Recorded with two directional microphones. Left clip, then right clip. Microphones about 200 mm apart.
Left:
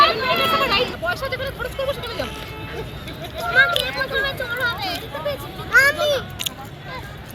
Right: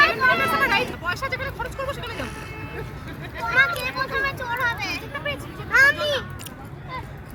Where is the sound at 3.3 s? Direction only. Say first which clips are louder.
Left 3 dB; 20° right (ahead or behind).